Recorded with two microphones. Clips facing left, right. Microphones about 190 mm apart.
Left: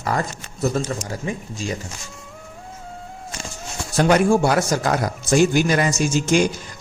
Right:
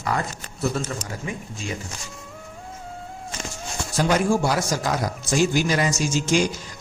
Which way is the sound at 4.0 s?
60° left (ahead or behind).